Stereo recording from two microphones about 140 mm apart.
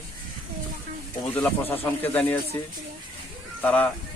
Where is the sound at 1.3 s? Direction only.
15° left (ahead or behind).